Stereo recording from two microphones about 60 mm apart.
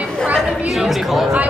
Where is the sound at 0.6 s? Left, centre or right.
Centre.